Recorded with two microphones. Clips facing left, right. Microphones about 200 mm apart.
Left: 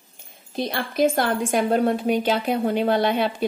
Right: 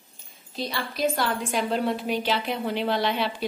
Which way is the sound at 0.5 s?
50° left (ahead or behind).